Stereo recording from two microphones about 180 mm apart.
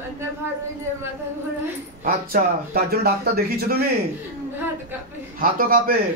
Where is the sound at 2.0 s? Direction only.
55° right (ahead or behind).